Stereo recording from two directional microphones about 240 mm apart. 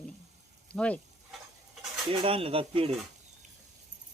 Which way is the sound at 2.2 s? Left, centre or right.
Right.